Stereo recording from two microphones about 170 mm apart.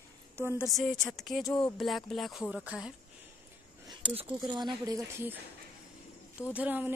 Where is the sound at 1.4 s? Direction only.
25° left (ahead or behind).